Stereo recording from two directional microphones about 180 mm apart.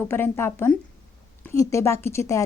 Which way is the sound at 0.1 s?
15° left (ahead or behind).